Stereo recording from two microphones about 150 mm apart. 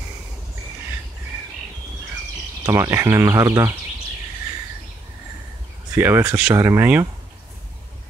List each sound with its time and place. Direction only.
2.6 s speech: 20° right (ahead or behind)
5.9 s speech: 15° right (ahead or behind)